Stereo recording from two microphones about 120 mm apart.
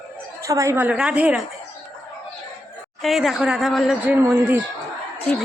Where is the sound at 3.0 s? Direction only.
Centre (ahead or behind).